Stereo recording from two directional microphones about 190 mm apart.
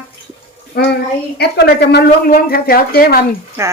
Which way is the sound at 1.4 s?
60° left (ahead or behind).